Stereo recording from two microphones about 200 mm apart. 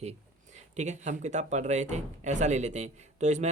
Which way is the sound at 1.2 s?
35° right (ahead or behind).